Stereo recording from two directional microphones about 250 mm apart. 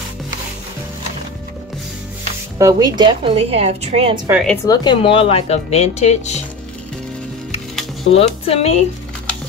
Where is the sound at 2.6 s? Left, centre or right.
Centre.